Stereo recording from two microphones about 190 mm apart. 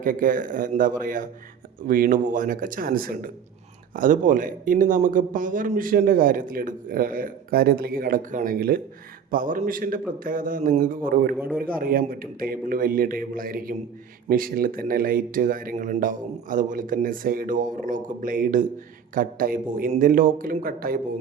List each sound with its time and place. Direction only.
0.0 s a man's voice: 45° right (ahead or behind)
11.3 s a man's voice: 10° right (ahead or behind)
11.6 s a man's voice: 50° right (ahead or behind)